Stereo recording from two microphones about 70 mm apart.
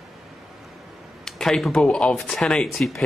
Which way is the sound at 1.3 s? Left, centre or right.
Centre.